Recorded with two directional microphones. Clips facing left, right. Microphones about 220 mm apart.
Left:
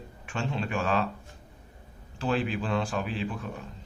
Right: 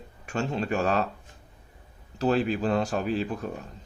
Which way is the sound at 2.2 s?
40° right (ahead or behind).